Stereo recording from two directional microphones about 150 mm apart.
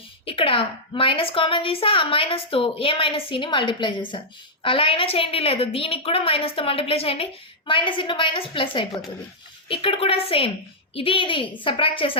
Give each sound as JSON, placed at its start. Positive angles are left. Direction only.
{"t": 0.3, "sound": "a woman's voice", "side_deg": 35}